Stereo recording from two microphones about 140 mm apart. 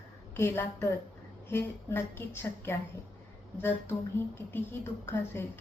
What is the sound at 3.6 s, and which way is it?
A woman's voice, 15° left (ahead or behind).